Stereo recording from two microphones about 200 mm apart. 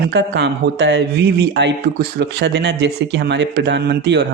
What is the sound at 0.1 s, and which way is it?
A man's voice, 60° right (ahead or behind).